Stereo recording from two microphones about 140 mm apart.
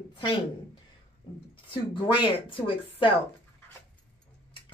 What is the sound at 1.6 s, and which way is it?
A woman's voice, 35° left (ahead or behind).